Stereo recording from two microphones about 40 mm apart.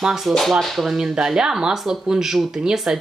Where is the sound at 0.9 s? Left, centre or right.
Centre.